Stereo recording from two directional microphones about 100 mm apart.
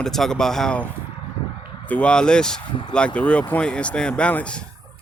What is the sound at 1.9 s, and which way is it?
Speech, 10° left (ahead or behind).